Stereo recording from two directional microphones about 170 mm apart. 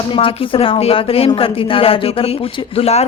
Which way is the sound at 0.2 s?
30° left (ahead or behind).